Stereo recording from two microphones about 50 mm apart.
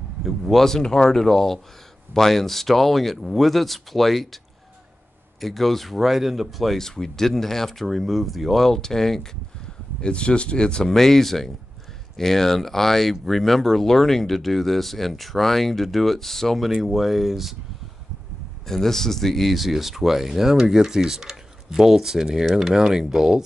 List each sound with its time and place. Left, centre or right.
0.2 s speech: centre
5.4 s speech: centre
6.8 s speech: centre
10.0 s speech: left
10.9 s speech: centre
18.7 s speech: centre